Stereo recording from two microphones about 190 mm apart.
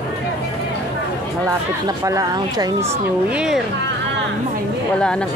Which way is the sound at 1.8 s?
20° right (ahead or behind).